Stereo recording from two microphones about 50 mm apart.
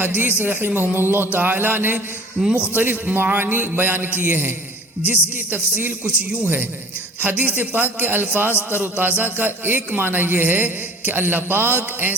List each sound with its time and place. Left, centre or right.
0.0 s a man's voice: right
2.4 s a man's voice: centre
2.7 s a man's voice: right